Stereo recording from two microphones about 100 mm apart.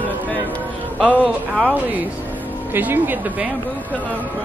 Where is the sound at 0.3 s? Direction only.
15° left (ahead or behind).